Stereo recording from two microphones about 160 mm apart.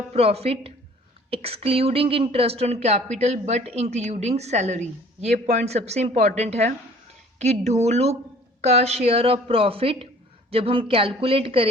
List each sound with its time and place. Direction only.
0.1 s a woman's voice: 40° right (ahead or behind)